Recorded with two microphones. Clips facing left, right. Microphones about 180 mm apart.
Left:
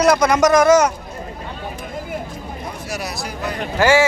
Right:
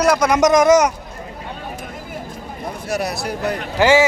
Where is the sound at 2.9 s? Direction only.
55° right (ahead or behind).